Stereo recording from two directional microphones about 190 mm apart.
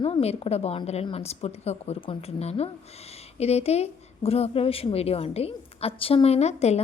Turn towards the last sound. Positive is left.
turn(degrees=35)  # may be behind; listen again after turning